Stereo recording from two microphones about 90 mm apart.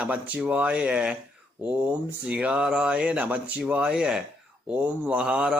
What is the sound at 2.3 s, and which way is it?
Speech, 15° right (ahead or behind).